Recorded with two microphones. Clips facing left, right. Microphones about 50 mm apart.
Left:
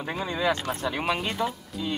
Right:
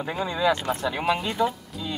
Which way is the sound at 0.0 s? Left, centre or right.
Centre.